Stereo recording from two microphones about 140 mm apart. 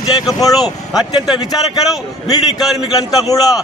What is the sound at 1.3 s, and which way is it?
A man's voice, 30° left (ahead or behind).